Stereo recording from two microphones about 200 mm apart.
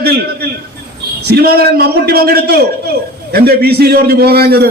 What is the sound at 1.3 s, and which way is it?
A man's voice, 50° right (ahead or behind).